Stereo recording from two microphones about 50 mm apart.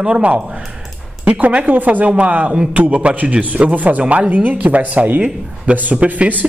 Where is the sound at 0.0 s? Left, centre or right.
Right.